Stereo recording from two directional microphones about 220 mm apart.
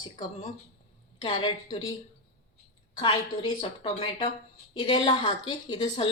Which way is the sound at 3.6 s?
25° left (ahead or behind).